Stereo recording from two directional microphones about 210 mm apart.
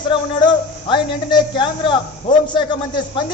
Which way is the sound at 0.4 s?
20° left (ahead or behind).